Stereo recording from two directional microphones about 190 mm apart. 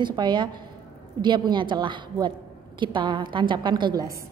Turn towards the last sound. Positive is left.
turn(degrees=-20)  # may be behind; listen again after turning